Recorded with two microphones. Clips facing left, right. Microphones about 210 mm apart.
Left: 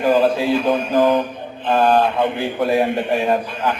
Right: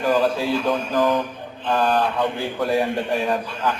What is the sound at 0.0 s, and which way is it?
Speech, 20° left (ahead or behind).